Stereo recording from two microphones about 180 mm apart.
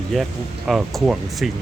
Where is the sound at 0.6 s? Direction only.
Centre (ahead or behind).